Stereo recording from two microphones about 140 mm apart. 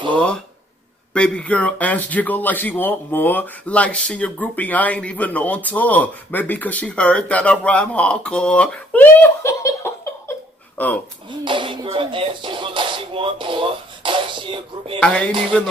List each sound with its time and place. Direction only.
1.1 s speech: 5° left (ahead or behind)
11.2 s music: 35° right (ahead or behind)